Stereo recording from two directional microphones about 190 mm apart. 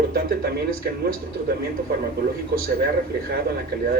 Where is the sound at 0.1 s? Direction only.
50° right (ahead or behind).